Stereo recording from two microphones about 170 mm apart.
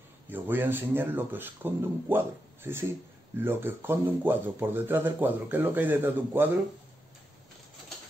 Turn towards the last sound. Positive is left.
turn(degrees=-10)  # may be behind; listen again after turning